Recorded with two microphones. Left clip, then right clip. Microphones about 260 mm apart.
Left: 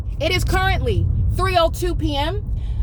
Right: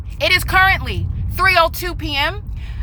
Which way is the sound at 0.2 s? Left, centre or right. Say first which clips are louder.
Right 7 dB; centre.